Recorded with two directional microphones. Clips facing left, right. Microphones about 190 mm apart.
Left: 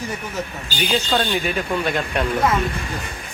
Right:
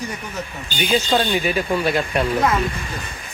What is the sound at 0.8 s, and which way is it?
A man's voice, 5° right (ahead or behind).